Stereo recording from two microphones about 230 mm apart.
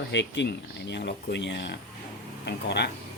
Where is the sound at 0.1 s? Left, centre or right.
Left.